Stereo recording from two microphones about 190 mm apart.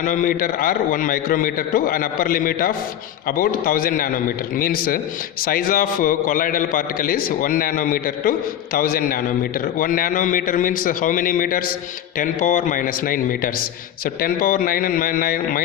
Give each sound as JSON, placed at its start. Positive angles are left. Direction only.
{"t": 0.0, "sound": "a man's voice", "side_deg": 45}